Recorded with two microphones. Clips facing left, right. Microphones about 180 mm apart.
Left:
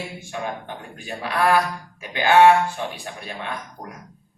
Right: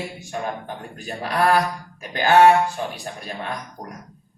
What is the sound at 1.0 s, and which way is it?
A man's voice, 40° right (ahead or behind).